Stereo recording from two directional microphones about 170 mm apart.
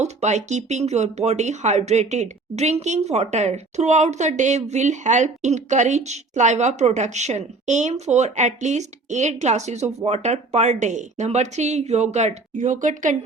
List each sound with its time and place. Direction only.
0.0 s speech: 40° right (ahead or behind)